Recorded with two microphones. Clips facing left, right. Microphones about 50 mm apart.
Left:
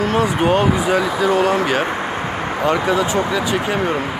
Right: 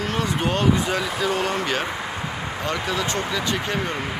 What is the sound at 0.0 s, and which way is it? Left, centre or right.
Speech, centre.